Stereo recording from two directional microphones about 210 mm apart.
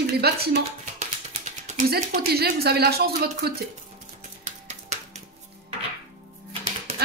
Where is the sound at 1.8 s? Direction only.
50° right (ahead or behind).